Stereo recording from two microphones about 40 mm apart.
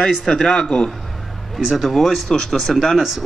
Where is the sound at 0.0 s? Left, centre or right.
Centre.